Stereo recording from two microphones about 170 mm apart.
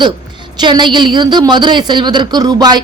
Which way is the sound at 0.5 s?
25° right (ahead or behind).